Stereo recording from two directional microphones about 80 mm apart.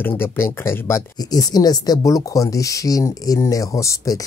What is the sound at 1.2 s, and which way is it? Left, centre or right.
Speech, left.